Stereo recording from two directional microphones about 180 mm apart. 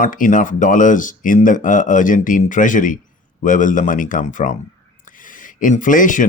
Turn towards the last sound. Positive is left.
turn(degrees=45)  # may be behind; listen again after turning